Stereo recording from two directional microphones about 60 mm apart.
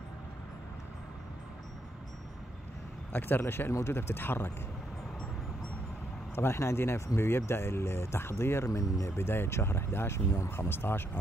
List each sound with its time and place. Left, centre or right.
3.1 s speech: left
6.3 s speech: left
8.7 s speech: left
9.0 s speech: left
10.7 s speech: left